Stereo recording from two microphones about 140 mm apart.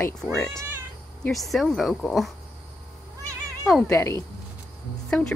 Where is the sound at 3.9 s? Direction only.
20° left (ahead or behind).